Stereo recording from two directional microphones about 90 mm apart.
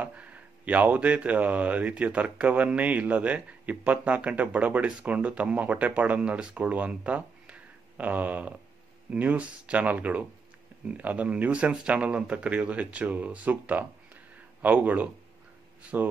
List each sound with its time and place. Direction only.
0.0 s speech: 15° right (ahead or behind)